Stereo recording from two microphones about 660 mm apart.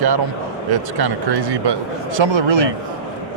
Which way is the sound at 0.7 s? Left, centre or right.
Right.